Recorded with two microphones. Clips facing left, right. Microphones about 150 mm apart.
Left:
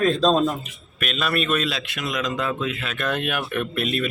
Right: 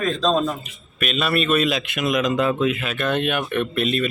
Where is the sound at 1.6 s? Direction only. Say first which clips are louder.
Right 6 dB; 20° right (ahead or behind).